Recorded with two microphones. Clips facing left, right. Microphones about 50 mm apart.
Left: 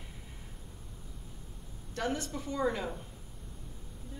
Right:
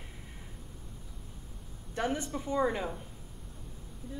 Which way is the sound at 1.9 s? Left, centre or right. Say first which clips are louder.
Right 2 dB; centre.